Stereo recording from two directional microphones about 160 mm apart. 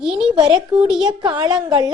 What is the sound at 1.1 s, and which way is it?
Speech, 30° right (ahead or behind).